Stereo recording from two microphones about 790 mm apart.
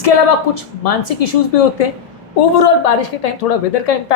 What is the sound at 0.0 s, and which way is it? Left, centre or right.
A woman's voice, left.